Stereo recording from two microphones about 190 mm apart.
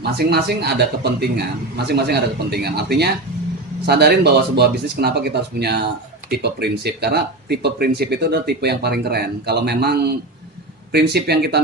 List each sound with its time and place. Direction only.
0.0 s speech: 60° right (ahead or behind)